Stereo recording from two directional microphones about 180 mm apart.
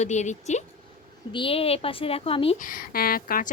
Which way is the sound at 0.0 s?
40° left (ahead or behind).